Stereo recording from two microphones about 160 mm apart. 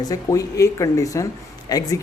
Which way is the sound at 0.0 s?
25° left (ahead or behind).